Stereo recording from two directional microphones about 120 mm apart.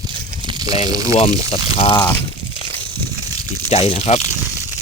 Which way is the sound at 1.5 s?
55° left (ahead or behind).